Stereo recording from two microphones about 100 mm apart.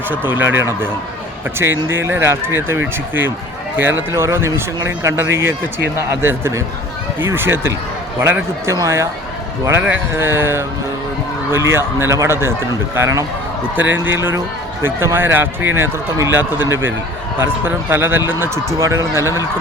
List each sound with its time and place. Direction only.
0.1 s speech: 20° right (ahead or behind)
9.8 s speech: 20° right (ahead or behind)